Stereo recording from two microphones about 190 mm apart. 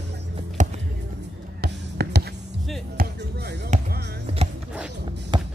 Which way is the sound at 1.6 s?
60° right (ahead or behind).